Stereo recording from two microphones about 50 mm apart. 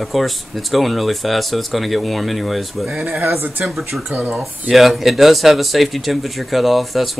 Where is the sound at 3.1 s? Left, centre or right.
Right.